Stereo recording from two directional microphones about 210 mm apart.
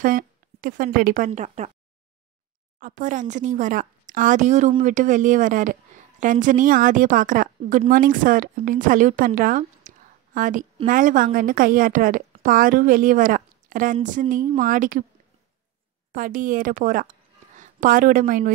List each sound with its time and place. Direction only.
0.0 s a woman's voice: 40° right (ahead or behind)
2.8 s a woman's voice: 40° right (ahead or behind)
16.1 s a woman's voice: 40° right (ahead or behind)